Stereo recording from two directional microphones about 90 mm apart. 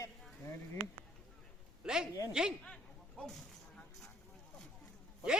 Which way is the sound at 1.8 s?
5° right (ahead or behind).